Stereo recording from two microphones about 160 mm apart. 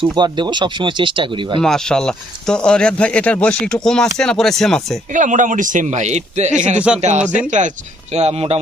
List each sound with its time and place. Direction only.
0.0 s speech: 30° right (ahead or behind)
1.6 s speech: 5° left (ahead or behind)
5.1 s a man's voice: 50° right (ahead or behind)
6.7 s speech: 5° right (ahead or behind)
7.3 s a man's voice: 50° right (ahead or behind)